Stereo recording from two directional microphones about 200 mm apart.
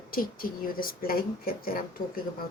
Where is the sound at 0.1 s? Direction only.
45° left (ahead or behind).